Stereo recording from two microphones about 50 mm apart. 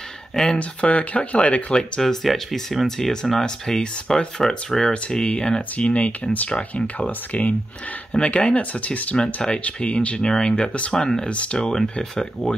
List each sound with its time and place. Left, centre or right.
0.6 s speech: left; by 3.1 s centre
3.4 s speech: centre
9.2 s speech: centre
11.5 s speech: centre